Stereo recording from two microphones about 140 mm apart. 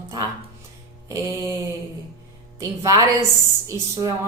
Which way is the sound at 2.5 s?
25° right (ahead or behind).